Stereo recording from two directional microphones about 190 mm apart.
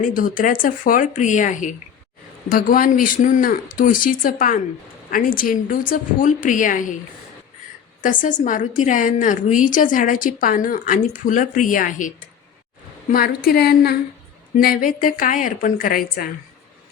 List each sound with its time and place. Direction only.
0.1 s a woman's voice: 45° left (ahead or behind)
8.0 s a woman's voice: 45° left (ahead or behind)